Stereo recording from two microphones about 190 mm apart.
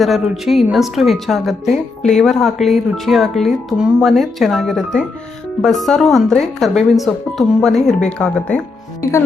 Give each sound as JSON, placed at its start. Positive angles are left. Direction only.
{"t": 0.0, "sound": "speech", "side_deg": 0}
{"t": 7.8, "sound": "speech", "side_deg": 40}
{"t": 8.2, "sound": "speech", "side_deg": 5}